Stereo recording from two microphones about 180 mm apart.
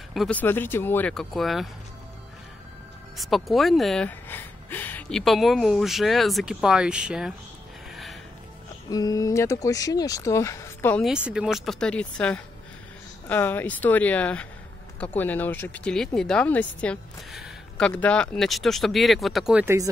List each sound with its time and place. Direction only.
0.1 s speech: 5° left (ahead or behind)
3.2 s speech: centre (ahead or behind)
7.9 s music: centre (ahead or behind)
8.9 s speech: 20° left (ahead or behind)
11.1 s speech: 5° right (ahead or behind)
19.6 s speech: 15° right (ahead or behind)